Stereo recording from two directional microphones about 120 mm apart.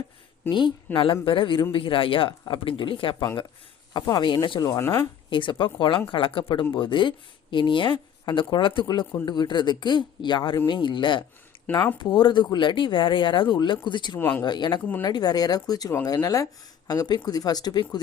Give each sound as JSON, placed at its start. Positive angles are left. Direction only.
{"t": 0.4, "sound": "speech", "side_deg": 20}
{"t": 0.9, "sound": "speech", "side_deg": 45}
{"t": 3.9, "sound": "speech", "side_deg": 35}
{"t": 4.7, "sound": "speech", "side_deg": 20}
{"t": 5.3, "sound": "speech", "side_deg": 45}
{"t": 11.5, "sound": "a sound", "side_deg": 40}
{"t": 11.9, "sound": "speech", "side_deg": 40}
{"t": 14.2, "sound": "speech", "side_deg": 15}
{"t": 14.4, "sound": "speech", "side_deg": 40}